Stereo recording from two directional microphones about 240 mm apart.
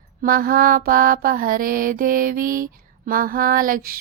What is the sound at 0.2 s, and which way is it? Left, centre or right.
Mantra, right.